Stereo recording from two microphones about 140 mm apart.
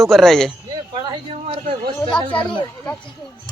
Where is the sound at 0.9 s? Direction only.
35° right (ahead or behind).